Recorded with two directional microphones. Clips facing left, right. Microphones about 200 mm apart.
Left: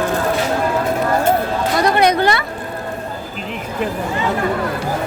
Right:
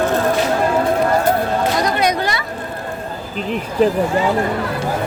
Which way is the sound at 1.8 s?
60° left (ahead or behind).